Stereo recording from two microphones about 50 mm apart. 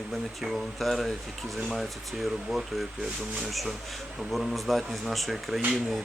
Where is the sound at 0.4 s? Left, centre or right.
Centre.